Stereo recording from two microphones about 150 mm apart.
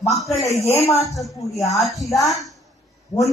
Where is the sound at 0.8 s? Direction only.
45° left (ahead or behind).